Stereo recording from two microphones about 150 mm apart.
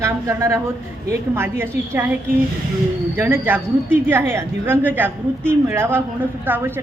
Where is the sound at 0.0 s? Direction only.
20° right (ahead or behind).